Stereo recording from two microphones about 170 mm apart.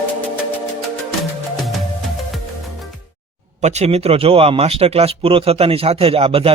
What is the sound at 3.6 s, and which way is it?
Speech, 40° right (ahead or behind).